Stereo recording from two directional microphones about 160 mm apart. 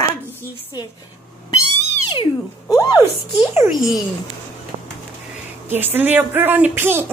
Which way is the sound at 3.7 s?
Centre (ahead or behind).